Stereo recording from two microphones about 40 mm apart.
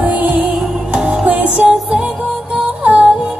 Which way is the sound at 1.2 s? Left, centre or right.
Right.